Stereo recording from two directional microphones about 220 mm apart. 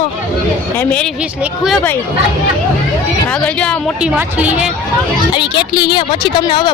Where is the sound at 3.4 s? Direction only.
5° left (ahead or behind).